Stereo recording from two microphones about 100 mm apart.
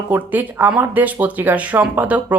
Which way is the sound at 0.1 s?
20° right (ahead or behind).